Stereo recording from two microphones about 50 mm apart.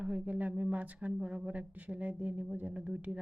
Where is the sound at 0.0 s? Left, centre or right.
Right.